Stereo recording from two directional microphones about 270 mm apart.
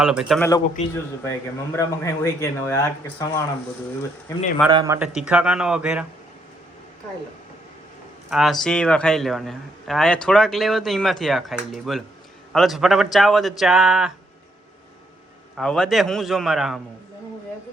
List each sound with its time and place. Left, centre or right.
0.0 s a man's voice: centre
4.7 s speech: centre
4.9 s a man's voice: centre
8.3 s a man's voice: centre
15.5 s a man's voice: centre